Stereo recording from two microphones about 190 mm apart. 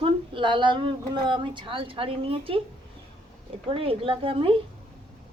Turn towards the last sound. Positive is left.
turn(degrees=-30)  # may be behind; listen again after turning